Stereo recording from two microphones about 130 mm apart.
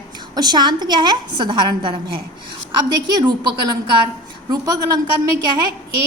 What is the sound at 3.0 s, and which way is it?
A woman's voice, 30° right (ahead or behind).